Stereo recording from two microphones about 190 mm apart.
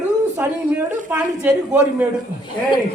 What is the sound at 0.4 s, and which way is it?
Speech, 15° right (ahead or behind).